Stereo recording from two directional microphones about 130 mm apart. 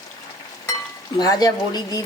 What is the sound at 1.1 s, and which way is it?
Speech, 30° left (ahead or behind).